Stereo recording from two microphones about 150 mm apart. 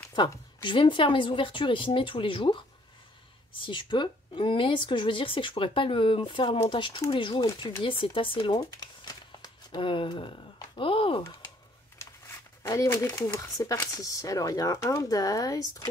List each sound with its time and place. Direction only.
0.6 s a woman's voice: 35° left (ahead or behind)
7.4 s speech: 25° left (ahead or behind)
7.8 s a woman's voice: 35° left (ahead or behind)
12.6 s speech: 20° left (ahead or behind)